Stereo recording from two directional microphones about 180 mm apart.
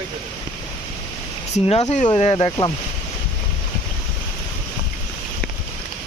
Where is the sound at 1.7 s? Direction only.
35° left (ahead or behind).